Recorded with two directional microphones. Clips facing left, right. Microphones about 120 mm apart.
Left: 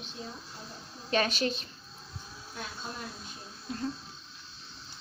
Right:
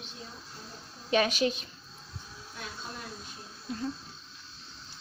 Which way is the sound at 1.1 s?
10° right (ahead or behind).